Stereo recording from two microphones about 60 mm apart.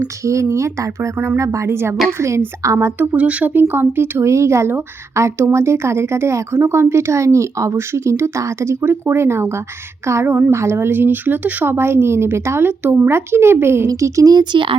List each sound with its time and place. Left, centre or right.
0.3 s speech: right
1.7 s speech: right
2.7 s a woman's voice: right
3.2 s speech: right
3.5 s a woman's voice: right
4.2 s a woman's voice: right
13.8 s speech: right